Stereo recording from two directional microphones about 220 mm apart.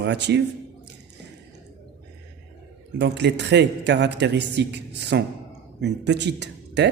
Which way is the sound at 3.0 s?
50° right (ahead or behind).